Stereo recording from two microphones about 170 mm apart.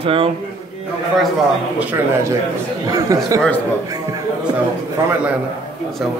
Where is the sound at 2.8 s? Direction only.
20° right (ahead or behind).